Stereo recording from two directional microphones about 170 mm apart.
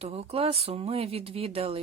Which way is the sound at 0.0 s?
35° right (ahead or behind).